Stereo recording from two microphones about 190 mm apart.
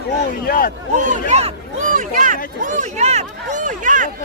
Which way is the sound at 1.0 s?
40° right (ahead or behind).